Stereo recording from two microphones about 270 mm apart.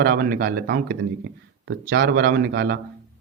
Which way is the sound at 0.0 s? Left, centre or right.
Right.